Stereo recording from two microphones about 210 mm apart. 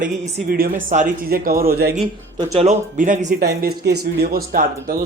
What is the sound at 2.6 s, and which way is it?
Speech, 35° right (ahead or behind).